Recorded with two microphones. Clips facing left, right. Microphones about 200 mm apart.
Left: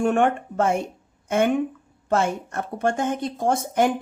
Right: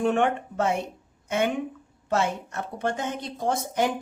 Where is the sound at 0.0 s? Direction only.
50° left (ahead or behind).